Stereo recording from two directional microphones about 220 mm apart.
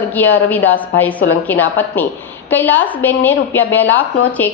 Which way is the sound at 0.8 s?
5° left (ahead or behind).